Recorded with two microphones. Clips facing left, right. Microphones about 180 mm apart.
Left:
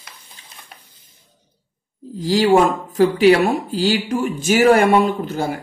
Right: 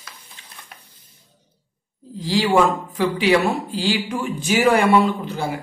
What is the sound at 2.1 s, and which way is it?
Speech, 45° left (ahead or behind).